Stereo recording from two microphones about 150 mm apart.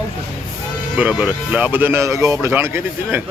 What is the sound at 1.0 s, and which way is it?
Speech, 10° right (ahead or behind).